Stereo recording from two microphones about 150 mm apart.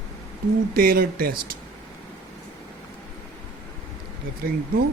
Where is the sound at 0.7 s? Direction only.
75° right (ahead or behind).